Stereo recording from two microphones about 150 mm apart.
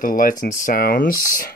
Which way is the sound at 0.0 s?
65° left (ahead or behind).